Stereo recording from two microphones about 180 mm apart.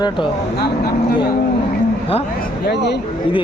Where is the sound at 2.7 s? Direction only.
70° left (ahead or behind).